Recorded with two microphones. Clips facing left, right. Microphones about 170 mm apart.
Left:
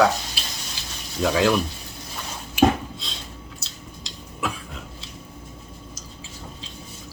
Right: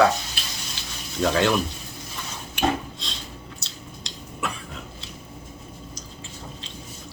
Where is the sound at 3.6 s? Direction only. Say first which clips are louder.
Even; centre (ahead or behind).